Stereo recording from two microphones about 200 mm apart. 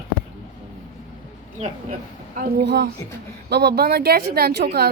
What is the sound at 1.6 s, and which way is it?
A woman's voice, 45° right (ahead or behind).